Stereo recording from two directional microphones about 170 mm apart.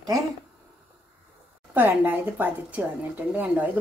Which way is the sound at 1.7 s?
10° right (ahead or behind).